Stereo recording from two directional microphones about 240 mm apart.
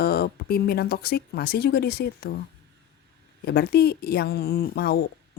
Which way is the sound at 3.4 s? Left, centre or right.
Left.